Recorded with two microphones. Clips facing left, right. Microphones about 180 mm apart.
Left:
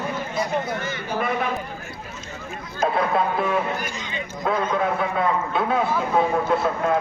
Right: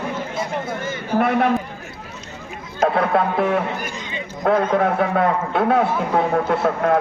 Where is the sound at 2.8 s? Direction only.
65° right (ahead or behind).